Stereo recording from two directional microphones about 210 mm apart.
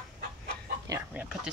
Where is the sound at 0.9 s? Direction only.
5° right (ahead or behind).